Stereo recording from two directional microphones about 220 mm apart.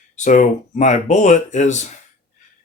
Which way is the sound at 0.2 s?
35° left (ahead or behind).